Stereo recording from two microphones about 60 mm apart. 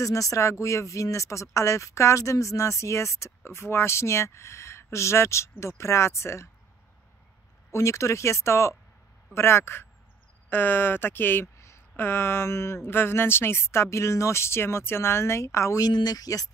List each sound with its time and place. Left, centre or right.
0.0 s speech: left
7.7 s speech: left
11.4 s speech: left